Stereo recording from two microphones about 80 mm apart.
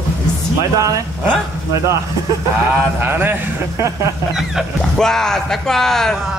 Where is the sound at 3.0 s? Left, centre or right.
Right.